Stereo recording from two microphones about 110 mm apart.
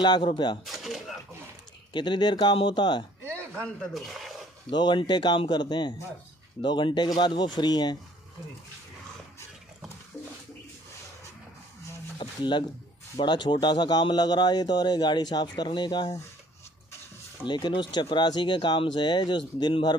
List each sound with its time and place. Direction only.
0.0 s speech: 45° left (ahead or behind)
0.7 s a sound: centre (ahead or behind)
1.9 s speech: 45° left (ahead or behind)
3.3 s a sound: 20° right (ahead or behind)
3.6 s speech: 5° left (ahead or behind)
4.6 s speech: 45° left (ahead or behind)
12.2 s speech: 45° left (ahead or behind)
17.5 s speech: 45° left (ahead or behind)